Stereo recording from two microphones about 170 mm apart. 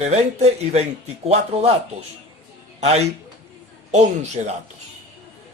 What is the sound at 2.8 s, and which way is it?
A man's voice, 40° right (ahead or behind).